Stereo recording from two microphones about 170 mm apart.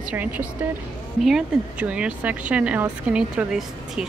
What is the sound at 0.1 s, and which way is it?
A woman's voice, 10° right (ahead or behind).